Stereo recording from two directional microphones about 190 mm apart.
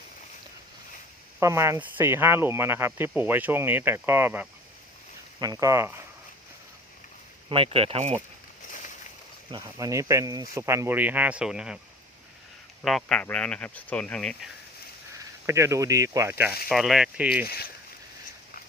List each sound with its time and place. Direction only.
1.4 s speech: 15° right (ahead or behind)
7.5 s speech: 30° right (ahead or behind)
9.5 s speech: 20° right (ahead or behind)
12.8 s speech: centre (ahead or behind)
15.4 s speech: 15° right (ahead or behind)
16.6 s speech: centre (ahead or behind)
17.4 s speech: 55° left (ahead or behind)